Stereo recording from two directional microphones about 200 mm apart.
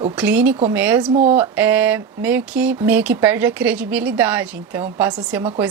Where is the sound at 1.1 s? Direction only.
35° right (ahead or behind).